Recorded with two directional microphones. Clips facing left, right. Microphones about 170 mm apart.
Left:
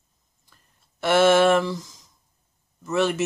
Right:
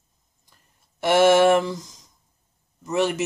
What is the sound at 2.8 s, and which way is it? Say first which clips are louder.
Speech: even; 15° right (ahead or behind).